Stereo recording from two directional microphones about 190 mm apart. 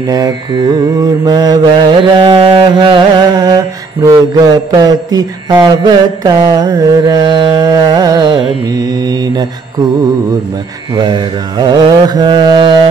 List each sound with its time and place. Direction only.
0.1 s mantra: 20° right (ahead or behind)
11.0 s mantra: 25° right (ahead or behind)